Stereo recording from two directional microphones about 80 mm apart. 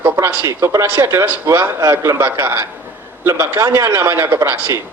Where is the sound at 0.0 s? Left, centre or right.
Right.